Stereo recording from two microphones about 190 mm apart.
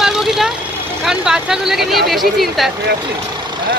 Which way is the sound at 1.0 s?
5° right (ahead or behind).